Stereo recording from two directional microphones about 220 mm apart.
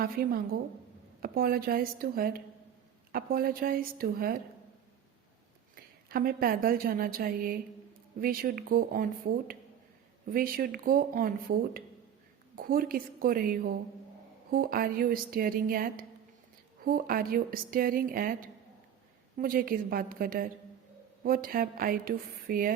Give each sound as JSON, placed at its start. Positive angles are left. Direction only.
{"t": 0.0, "sound": "a woman's voice", "side_deg": -40}
{"t": 5.7, "sound": "a woman's voice", "side_deg": -40}